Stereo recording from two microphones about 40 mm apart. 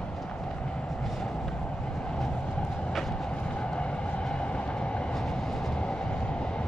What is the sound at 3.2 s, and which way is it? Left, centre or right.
Train, left.